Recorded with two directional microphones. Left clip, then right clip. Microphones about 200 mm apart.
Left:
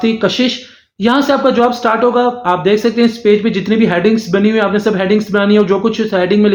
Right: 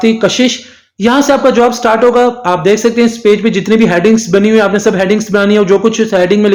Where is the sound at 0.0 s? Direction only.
35° right (ahead or behind).